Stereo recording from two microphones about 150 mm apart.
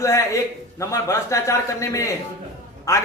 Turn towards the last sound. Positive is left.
turn(degrees=20)  # may be behind; listen again after turning